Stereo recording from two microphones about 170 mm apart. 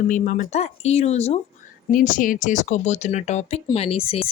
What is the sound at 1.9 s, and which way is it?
Speech, 55° left (ahead or behind).